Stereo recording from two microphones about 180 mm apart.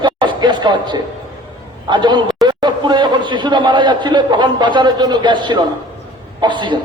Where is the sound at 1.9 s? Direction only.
25° right (ahead or behind).